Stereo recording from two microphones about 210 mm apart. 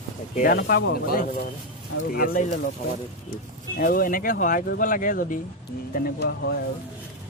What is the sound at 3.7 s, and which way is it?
Speech, 45° left (ahead or behind).